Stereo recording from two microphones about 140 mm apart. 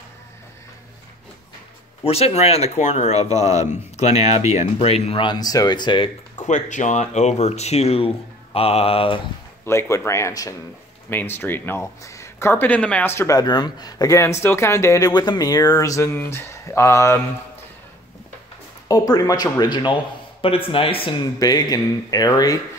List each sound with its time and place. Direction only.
2.0 s speech: 45° left (ahead or behind)
6.4 s speech: 60° left (ahead or behind); by 9.2 s 40° left (ahead or behind)
9.7 s speech: 20° left (ahead or behind)
13.4 s speech: 30° left (ahead or behind)
18.9 s speech: 25° left (ahead or behind)
21.4 s speech: 30° left (ahead or behind)